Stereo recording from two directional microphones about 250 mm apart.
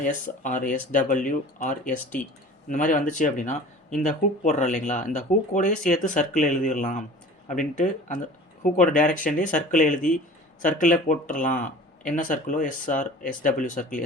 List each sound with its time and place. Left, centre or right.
0.0 s speech: left